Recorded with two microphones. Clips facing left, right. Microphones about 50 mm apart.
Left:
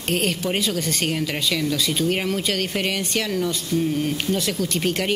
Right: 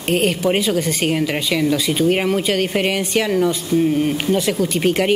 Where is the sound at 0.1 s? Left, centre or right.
Centre.